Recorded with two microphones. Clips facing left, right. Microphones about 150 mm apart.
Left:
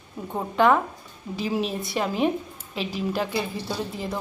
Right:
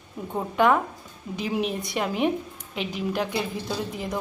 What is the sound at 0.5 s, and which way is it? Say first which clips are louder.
Speech: left 1 dB; 5° right (ahead or behind).